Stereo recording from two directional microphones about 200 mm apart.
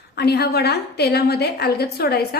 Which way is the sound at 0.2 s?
55° left (ahead or behind).